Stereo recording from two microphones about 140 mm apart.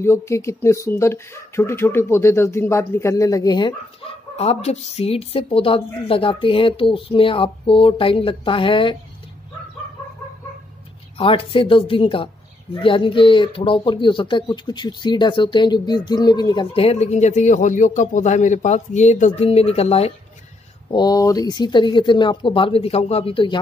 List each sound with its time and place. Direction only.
0.0 s speech: 20° left (ahead or behind); by 8.9 s 40° left (ahead or behind)
11.1 s speech: 40° left (ahead or behind)
20.9 s speech: 30° left (ahead or behind)